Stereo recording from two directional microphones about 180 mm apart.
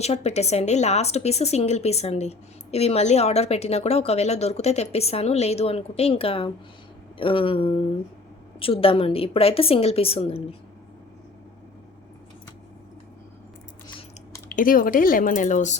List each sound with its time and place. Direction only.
0.0 s a woman's voice: 35° left (ahead or behind)
14.5 s speech: 50° left (ahead or behind)